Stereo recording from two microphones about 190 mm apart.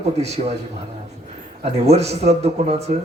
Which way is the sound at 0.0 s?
35° right (ahead or behind).